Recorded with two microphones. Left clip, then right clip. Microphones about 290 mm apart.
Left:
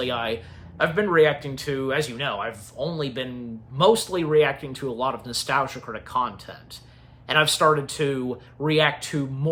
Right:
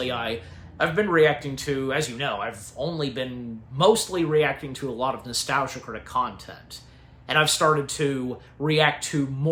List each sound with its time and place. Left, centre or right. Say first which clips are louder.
0.0 s a man's voice: left 2 dB; centre